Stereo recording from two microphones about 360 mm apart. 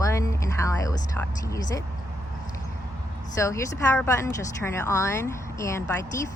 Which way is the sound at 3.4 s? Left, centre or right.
Centre.